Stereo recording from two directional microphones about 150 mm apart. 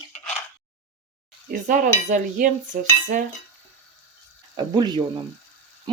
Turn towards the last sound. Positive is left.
turn(degrees=-30)  # may be behind; listen again after turning